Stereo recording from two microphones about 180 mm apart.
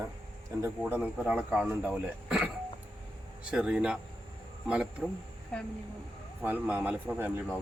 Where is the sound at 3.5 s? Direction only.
5° right (ahead or behind).